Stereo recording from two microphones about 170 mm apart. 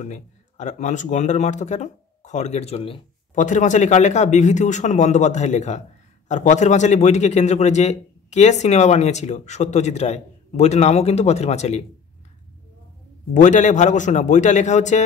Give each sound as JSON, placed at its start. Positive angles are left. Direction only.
{"t": 0.0, "sound": "speech", "side_deg": 45}
{"t": 3.3, "sound": "a man's voice", "side_deg": 45}
{"t": 13.3, "sound": "speech", "side_deg": 45}